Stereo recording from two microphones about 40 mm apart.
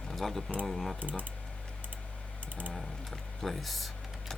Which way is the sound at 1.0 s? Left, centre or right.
Right.